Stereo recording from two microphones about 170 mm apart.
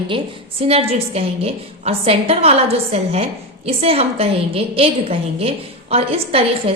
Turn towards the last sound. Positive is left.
turn(degrees=-35)  # may be behind; listen again after turning